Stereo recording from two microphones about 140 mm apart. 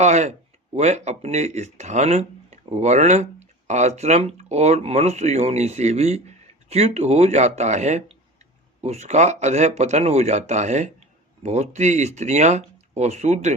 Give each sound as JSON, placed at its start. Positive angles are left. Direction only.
{"t": 0.0, "sound": "speech", "side_deg": -55}